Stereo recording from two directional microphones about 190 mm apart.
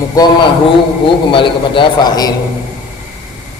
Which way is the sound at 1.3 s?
25° left (ahead or behind).